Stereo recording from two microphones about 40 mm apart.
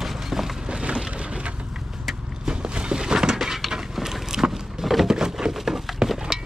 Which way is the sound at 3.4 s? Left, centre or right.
Centre.